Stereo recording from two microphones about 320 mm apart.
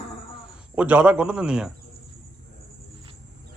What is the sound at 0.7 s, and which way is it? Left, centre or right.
Speech, centre.